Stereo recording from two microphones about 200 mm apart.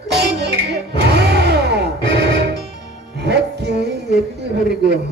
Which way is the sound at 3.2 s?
55° right (ahead or behind).